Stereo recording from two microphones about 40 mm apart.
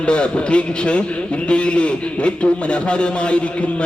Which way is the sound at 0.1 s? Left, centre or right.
Left.